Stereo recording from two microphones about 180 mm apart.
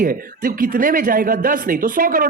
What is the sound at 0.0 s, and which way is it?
Speech, 50° right (ahead or behind).